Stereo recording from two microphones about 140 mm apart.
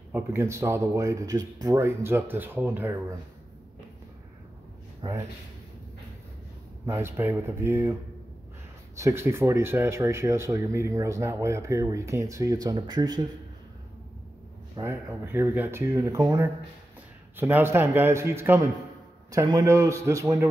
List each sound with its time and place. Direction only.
0.1 s speech: 15° right (ahead or behind)
5.0 s speech: 30° right (ahead or behind)
6.9 s speech: 20° right (ahead or behind)
8.9 s speech: 20° right (ahead or behind)
14.8 s speech: 20° right (ahead or behind)